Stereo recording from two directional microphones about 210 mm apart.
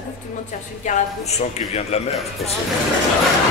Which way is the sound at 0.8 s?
35° left (ahead or behind).